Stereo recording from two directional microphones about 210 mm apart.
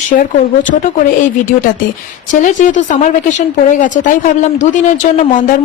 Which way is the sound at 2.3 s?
35° left (ahead or behind).